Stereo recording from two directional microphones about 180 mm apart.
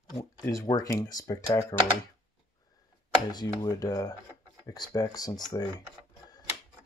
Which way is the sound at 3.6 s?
20° left (ahead or behind).